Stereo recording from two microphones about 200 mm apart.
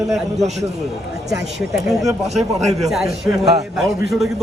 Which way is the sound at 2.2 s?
35° right (ahead or behind).